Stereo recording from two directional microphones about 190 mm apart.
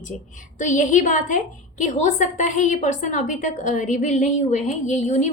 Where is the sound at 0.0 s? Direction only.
40° left (ahead or behind).